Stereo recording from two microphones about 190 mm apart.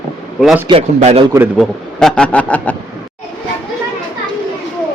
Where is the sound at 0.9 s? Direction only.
35° right (ahead or behind).